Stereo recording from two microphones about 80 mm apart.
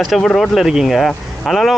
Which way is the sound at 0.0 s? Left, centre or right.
Centre.